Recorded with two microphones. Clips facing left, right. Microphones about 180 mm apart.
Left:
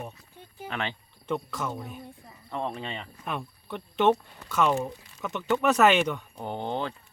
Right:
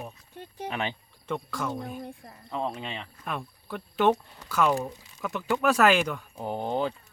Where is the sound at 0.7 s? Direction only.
15° right (ahead or behind).